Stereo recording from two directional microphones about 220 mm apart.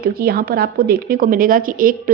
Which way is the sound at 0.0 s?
45° right (ahead or behind).